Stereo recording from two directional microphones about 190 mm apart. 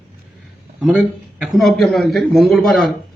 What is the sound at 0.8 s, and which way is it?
A man's voice, 5° right (ahead or behind).